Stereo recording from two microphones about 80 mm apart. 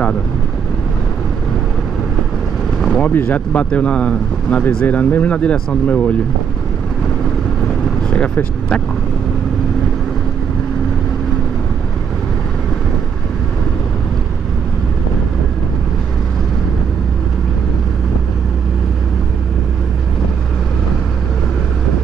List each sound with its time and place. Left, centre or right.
2.9 s speech: centre
8.1 s speech: centre